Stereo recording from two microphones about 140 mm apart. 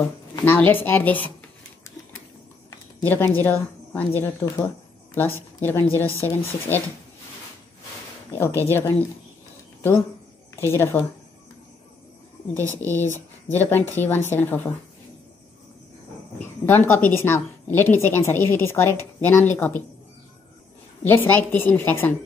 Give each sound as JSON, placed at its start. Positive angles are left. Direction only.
{"t": 0.0, "sound": "a woman's voice", "side_deg": 15}
{"t": 3.0, "sound": "a woman's voice", "side_deg": 15}
{"t": 8.3, "sound": "a woman's voice", "side_deg": 15}
{"t": 10.6, "sound": "a woman's voice", "side_deg": 20}
{"t": 12.7, "sound": "a woman's voice", "side_deg": 15}
{"t": 16.6, "sound": "a woman's voice", "side_deg": 15}
{"t": 21.0, "sound": "a woman's voice", "side_deg": 15}